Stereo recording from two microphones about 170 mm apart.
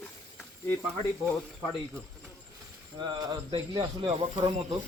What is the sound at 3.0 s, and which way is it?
Speech, 25° right (ahead or behind).